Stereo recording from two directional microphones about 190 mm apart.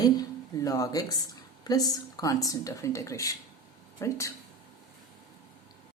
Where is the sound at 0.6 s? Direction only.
20° left (ahead or behind).